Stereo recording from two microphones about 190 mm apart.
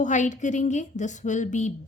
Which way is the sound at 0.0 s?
40° left (ahead or behind).